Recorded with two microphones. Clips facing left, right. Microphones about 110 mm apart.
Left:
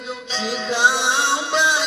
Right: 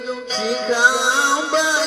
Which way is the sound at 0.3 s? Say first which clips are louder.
Right 4 dB; 35° right (ahead or behind).